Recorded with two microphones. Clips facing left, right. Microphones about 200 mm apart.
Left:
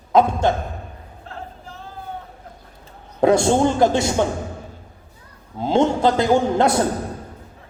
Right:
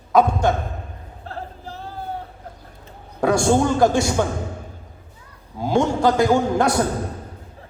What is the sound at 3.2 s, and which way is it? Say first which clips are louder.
Speech: left 2 dB; 20° left (ahead or behind).